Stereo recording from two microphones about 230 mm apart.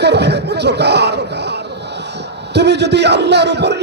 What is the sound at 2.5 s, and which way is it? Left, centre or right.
A man's voice, right.